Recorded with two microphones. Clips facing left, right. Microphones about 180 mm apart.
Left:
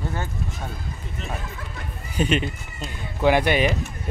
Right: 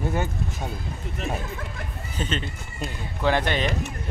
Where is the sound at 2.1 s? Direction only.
15° left (ahead or behind).